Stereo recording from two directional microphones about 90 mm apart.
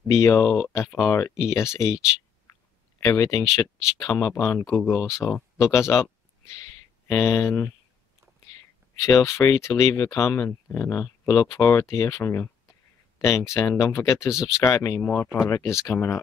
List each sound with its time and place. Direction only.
0.1 s speech: 35° left (ahead or behind)
3.0 s speech: 40° left (ahead or behind); by 5.4 s 20° left (ahead or behind)
5.6 s speech: 35° left (ahead or behind)
8.9 s speech: 35° left (ahead or behind)
11.2 s speech: 45° left (ahead or behind)